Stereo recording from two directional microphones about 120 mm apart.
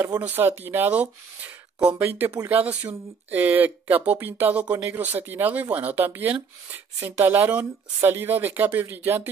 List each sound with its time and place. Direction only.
0.2 s speech: 15° right (ahead or behind)